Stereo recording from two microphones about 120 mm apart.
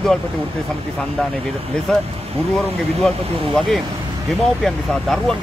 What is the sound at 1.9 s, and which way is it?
Speech, 5° left (ahead or behind).